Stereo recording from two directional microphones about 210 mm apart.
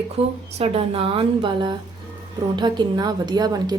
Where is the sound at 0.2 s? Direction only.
30° right (ahead or behind).